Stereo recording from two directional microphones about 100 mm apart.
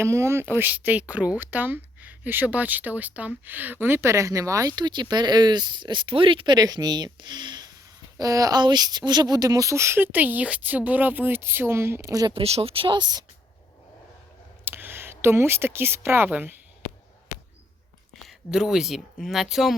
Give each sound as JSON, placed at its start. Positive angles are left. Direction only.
{"t": 0.0, "sound": "speech", "side_deg": -30}
{"t": 8.2, "sound": "speech", "side_deg": -35}
{"t": 12.3, "sound": "speech", "side_deg": -85}
{"t": 14.6, "sound": "speech", "side_deg": -20}
{"t": 18.3, "sound": "speech", "side_deg": -5}